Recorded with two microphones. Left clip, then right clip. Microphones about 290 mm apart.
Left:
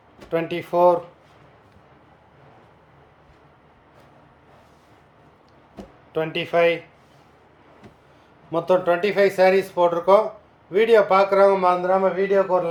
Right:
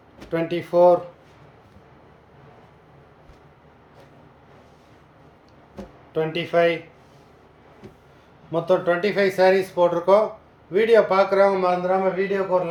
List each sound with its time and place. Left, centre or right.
0.3 s a man's voice: centre
6.1 s a man's voice: centre
8.5 s a man's voice: centre